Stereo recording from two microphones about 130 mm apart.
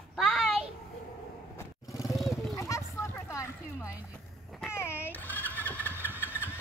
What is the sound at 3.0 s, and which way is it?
Boat, 20° left (ahead or behind).